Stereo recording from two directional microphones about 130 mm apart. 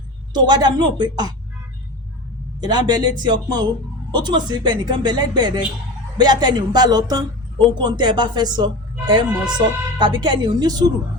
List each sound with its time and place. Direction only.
0.3 s speech: 35° right (ahead or behind)
2.6 s speech: 30° right (ahead or behind)